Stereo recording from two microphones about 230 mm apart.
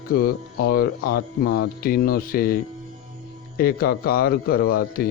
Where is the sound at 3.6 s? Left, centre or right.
Left.